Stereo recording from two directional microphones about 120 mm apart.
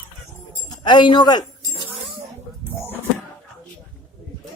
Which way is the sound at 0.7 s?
40° left (ahead or behind).